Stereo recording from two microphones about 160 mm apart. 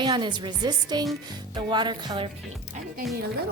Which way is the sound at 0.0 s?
30° right (ahead or behind).